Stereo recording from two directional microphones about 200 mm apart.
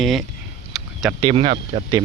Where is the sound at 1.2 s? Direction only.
30° right (ahead or behind).